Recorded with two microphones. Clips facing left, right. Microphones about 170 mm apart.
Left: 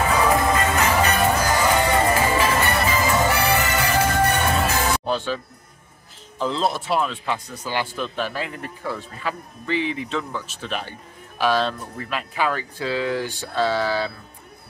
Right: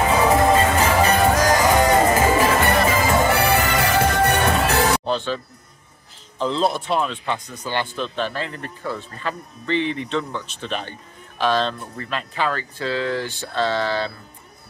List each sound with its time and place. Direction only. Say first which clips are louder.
0.3 s music: right 4 dB; 30° right (ahead or behind)
1.3 s music: right 4 dB; 90° right
2.3 s music: right 3 dB; 45° right (ahead or behind); by 5.0 s 70° right (ahead or behind)
5.0 s music: right 1 dB; 10° left (ahead or behind)
6.3 s speech: right 2 dB; 5° left (ahead or behind)